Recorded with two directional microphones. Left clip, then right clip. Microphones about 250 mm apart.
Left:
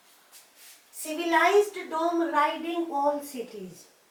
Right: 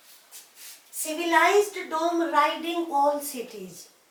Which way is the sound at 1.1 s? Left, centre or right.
Centre.